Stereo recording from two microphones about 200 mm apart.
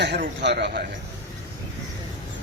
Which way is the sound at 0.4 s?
55° right (ahead or behind).